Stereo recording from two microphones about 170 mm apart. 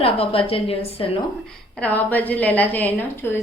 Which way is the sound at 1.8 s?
10° left (ahead or behind).